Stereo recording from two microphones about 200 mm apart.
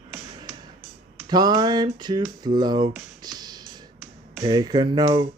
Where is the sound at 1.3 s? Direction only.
20° right (ahead or behind).